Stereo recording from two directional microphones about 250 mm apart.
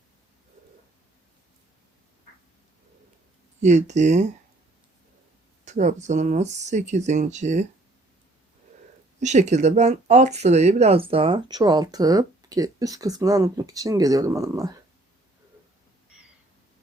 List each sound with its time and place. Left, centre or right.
3.6 s speech: right
5.6 s speech: right
9.2 s speech: right